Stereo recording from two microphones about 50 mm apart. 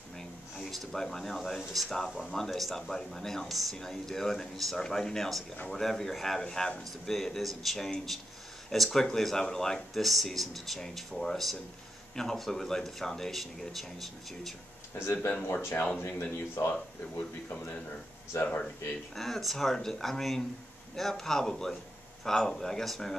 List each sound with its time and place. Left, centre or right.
0.6 s speech: centre
15.0 s speech: left
19.1 s speech: centre